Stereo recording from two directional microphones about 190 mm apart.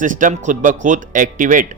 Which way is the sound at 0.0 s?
45° right (ahead or behind).